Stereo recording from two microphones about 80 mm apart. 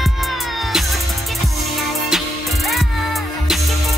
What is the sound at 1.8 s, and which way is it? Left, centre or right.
Music, centre.